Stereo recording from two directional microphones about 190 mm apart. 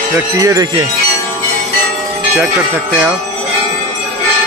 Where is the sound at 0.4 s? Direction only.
20° right (ahead or behind).